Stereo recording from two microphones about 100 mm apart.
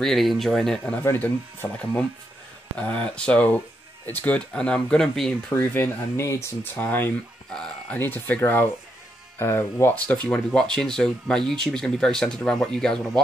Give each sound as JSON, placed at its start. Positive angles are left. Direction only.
{"t": 0.0, "sound": "speech", "side_deg": 0}
{"t": 0.9, "sound": "speech", "side_deg": 20}
{"t": 2.8, "sound": "speech", "side_deg": 15}
{"t": 5.5, "sound": "speech", "side_deg": 20}
{"t": 7.5, "sound": "speech", "side_deg": 5}
{"t": 8.0, "sound": "speech", "side_deg": 20}
{"t": 10.0, "sound": "speech", "side_deg": 10}